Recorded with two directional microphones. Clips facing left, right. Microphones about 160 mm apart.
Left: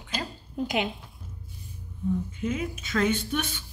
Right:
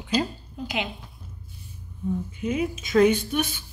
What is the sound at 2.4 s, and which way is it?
Speech, 15° right (ahead or behind).